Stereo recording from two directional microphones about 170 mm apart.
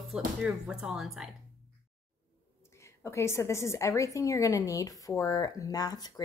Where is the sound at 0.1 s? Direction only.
5° right (ahead or behind).